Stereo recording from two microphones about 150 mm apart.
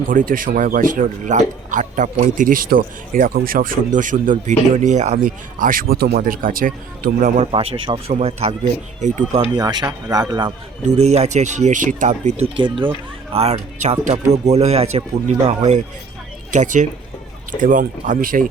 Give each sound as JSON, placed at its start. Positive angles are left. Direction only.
{"t": 0.1, "sound": "speech", "side_deg": -65}
{"t": 5.1, "sound": "speech", "side_deg": -65}
{"t": 7.5, "sound": "speech", "side_deg": -40}
{"t": 9.6, "sound": "a man's voice", "side_deg": -25}
{"t": 10.8, "sound": "speech", "side_deg": -50}
{"t": 12.5, "sound": "speech", "side_deg": -35}
{"t": 13.3, "sound": "speech", "side_deg": -45}